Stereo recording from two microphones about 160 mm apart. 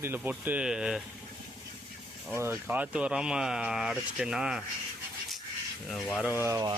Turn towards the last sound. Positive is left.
turn(degrees=-20)  # may be behind; listen again after turning